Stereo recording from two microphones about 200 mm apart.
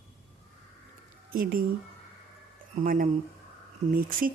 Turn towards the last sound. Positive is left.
turn(degrees=-45)  # may be behind; listen again after turning